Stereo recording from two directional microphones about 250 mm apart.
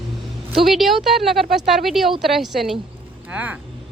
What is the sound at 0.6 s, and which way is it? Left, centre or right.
A woman's voice, centre.